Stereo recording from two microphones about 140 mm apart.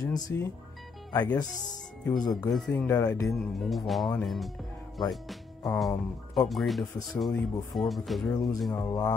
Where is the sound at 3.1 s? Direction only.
20° left (ahead or behind).